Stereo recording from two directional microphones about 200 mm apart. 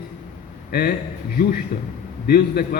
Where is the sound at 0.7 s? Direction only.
50° left (ahead or behind).